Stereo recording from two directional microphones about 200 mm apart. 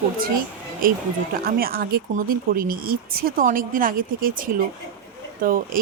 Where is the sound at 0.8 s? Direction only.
45° right (ahead or behind).